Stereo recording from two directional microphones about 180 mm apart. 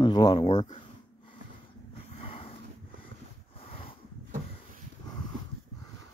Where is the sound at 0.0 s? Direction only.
25° left (ahead or behind).